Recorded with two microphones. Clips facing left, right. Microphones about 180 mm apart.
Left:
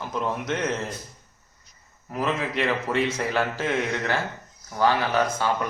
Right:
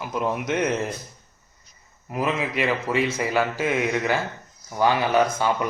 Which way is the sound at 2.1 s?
10° right (ahead or behind).